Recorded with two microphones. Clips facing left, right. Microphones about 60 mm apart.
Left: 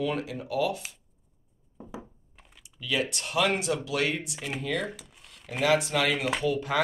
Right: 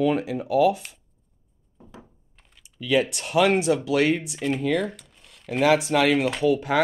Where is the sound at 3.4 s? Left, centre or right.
Centre.